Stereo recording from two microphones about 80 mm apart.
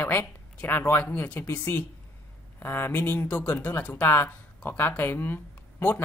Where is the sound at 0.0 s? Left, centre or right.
Left.